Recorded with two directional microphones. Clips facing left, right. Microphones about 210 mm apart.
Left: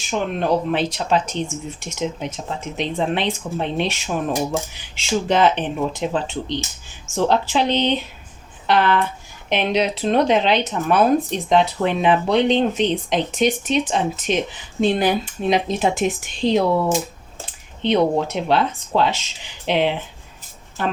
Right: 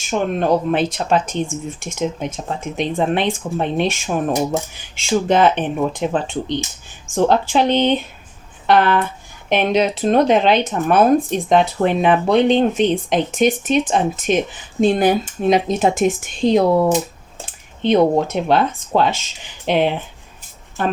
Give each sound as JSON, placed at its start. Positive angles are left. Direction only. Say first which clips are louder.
{"t": 0.1, "sound": "speech", "louder": "right 3 dB", "side_deg": -50}
{"t": 17.8, "sound": "speech", "louder": "right 3 dB", "side_deg": -45}